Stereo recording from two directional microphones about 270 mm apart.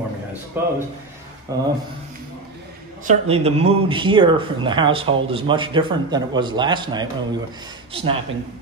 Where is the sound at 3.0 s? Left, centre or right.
Right.